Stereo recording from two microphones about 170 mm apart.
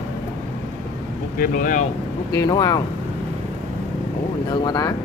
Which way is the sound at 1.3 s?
55° left (ahead or behind).